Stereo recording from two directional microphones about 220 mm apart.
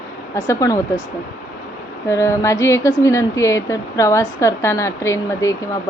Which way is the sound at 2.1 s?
15° left (ahead or behind).